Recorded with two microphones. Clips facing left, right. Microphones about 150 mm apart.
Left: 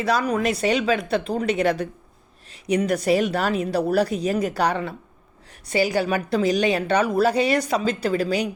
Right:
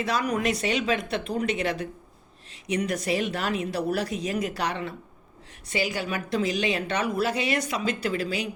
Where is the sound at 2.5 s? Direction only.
35° left (ahead or behind).